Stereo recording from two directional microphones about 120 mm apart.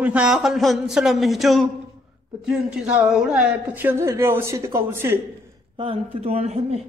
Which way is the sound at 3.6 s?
15° right (ahead or behind).